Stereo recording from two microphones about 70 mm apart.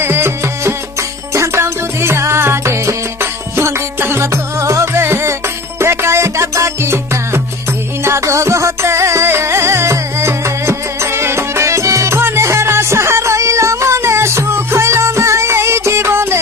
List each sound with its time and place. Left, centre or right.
0.0 s music: right
12.2 s music: right